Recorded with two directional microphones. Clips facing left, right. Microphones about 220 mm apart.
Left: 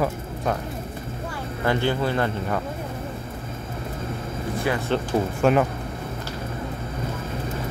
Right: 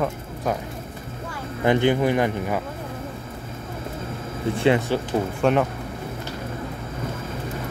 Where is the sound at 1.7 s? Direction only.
15° right (ahead or behind).